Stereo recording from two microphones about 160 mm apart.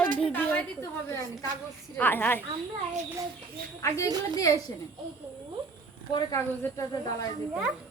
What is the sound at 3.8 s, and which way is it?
Speech, 20° left (ahead or behind).